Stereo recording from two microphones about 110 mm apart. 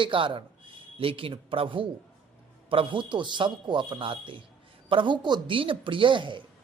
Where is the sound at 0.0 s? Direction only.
50° right (ahead or behind).